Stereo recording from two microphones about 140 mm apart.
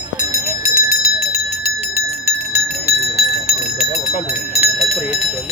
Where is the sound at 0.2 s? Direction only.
20° right (ahead or behind).